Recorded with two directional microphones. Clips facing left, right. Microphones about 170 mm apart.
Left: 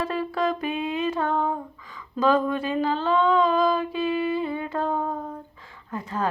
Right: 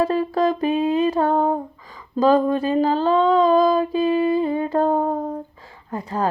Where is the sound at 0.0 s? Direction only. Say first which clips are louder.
Right 6 dB; 40° right (ahead or behind).